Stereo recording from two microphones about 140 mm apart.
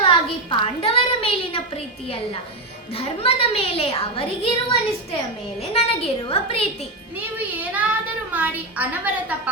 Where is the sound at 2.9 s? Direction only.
45° left (ahead or behind).